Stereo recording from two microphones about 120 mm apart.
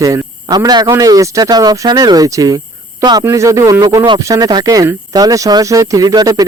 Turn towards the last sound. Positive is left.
turn(degrees=-30)  # may be behind; listen again after turning